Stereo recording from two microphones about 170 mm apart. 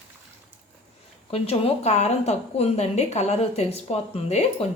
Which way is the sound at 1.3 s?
35° left (ahead or behind).